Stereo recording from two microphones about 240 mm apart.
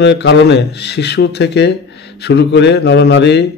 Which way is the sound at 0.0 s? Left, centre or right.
Left.